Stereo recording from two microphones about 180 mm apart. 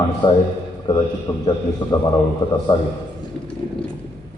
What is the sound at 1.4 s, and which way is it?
A man's voice, 20° left (ahead or behind).